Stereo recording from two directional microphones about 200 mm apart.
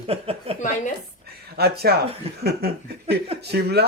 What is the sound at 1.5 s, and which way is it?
Speech, 50° right (ahead or behind).